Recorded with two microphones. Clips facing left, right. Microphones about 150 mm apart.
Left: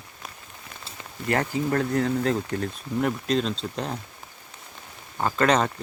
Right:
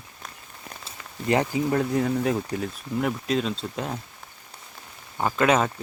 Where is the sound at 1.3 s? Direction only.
15° right (ahead or behind).